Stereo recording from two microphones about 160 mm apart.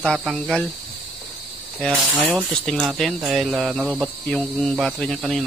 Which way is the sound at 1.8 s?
Centre (ahead or behind).